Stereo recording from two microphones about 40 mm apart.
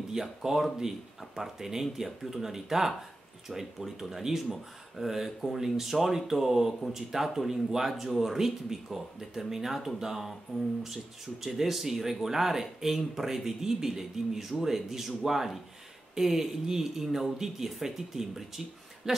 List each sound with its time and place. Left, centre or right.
0.1 s speech: centre
11.4 s speech: centre